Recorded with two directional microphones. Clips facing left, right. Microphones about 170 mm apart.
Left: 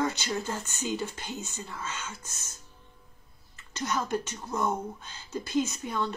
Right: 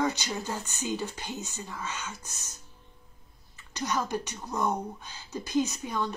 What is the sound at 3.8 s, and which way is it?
Speech, 15° right (ahead or behind).